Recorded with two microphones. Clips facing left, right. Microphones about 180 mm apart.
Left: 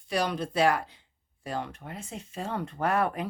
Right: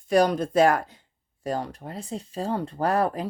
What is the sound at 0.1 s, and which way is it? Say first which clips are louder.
Speech: right 8 dB; 45° right (ahead or behind).